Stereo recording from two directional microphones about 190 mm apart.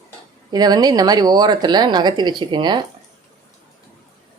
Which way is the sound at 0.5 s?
20° right (ahead or behind).